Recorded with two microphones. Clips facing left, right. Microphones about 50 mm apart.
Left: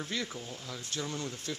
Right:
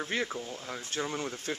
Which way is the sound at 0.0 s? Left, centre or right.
Right.